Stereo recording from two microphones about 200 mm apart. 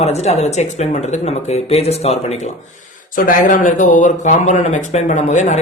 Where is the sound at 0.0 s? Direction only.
35° left (ahead or behind).